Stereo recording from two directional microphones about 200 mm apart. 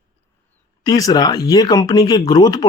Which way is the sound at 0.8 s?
20° left (ahead or behind).